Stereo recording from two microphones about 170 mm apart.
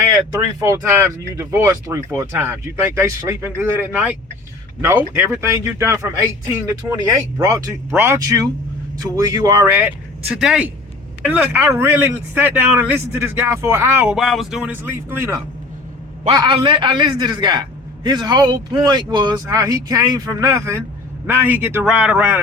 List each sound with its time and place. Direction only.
0.0 s speech: 20° right (ahead or behind)
10.3 s speech: 5° right (ahead or behind)
16.3 s speech: 25° right (ahead or behind); by 22.4 s 10° right (ahead or behind)